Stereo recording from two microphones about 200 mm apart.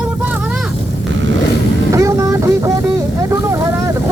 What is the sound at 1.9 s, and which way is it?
Vehicle, 15° right (ahead or behind).